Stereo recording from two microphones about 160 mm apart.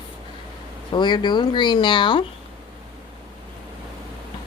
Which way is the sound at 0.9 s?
30° left (ahead or behind).